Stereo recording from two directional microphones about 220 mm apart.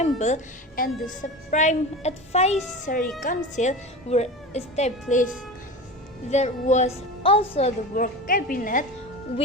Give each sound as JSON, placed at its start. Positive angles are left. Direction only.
{"t": 0.2, "sound": "speech", "side_deg": 30}
{"t": 6.3, "sound": "a woman's voice", "side_deg": 30}
{"t": 7.9, "sound": "speech", "side_deg": 40}